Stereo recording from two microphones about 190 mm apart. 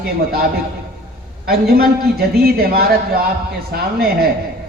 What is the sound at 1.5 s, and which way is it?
A man's voice, 55° right (ahead or behind).